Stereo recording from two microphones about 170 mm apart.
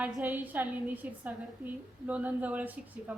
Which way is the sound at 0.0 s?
10° right (ahead or behind).